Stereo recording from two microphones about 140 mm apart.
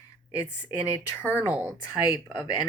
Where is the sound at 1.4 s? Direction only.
15° right (ahead or behind).